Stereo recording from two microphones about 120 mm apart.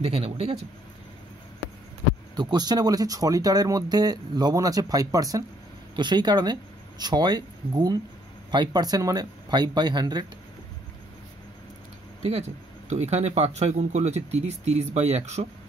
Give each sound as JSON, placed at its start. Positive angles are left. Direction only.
{"t": 0.0, "sound": "a man's voice", "side_deg": -55}
{"t": 2.3, "sound": "speech", "side_deg": -35}
{"t": 12.3, "sound": "speech", "side_deg": -70}